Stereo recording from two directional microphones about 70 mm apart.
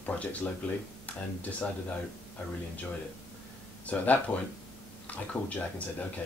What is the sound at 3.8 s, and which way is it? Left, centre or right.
Speech, left.